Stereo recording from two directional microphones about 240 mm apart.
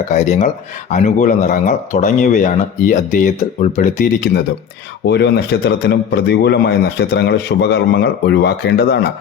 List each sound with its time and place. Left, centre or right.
0.1 s a man's voice: left